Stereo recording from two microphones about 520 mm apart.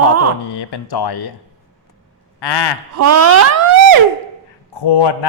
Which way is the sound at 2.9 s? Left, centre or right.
Right.